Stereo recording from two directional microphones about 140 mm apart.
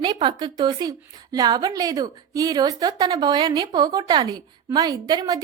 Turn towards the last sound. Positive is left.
turn(degrees=-25)  # may be behind; listen again after turning